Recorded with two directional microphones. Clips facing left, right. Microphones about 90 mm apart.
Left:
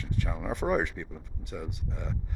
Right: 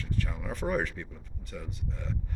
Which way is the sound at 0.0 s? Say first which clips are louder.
Left 2 dB; 20° left (ahead or behind).